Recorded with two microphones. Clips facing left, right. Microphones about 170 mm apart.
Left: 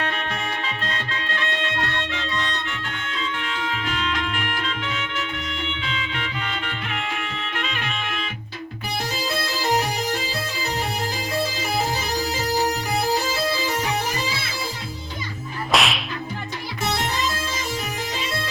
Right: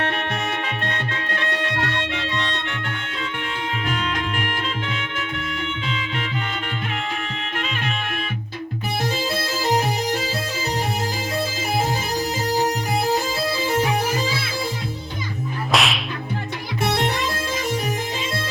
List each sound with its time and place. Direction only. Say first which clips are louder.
0.0 s music: right 3 dB; 60° right (ahead or behind)
3.8 s music: right 1 dB; 45° right (ahead or behind)
15.7 s whip: even; centre (ahead or behind)
16.8 s music: right 3 dB; 60° right (ahead or behind)